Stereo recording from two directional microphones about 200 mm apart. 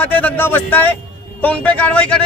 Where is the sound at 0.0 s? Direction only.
10° left (ahead or behind).